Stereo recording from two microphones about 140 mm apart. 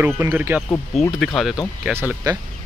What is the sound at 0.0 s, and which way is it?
Speech, 15° right (ahead or behind).